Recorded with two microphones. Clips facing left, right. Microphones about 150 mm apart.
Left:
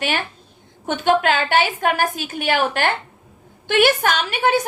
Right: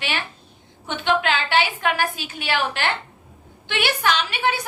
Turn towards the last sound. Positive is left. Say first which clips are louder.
# left 4 dB
turn(degrees=45)  # may be behind; listen again after turning